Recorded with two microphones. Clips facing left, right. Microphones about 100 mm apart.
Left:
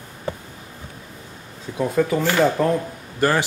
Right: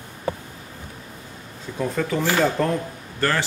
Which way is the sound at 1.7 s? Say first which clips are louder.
Left 4 dB; 10° left (ahead or behind).